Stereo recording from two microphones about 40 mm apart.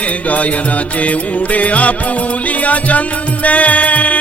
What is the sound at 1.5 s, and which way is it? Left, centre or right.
Music, left.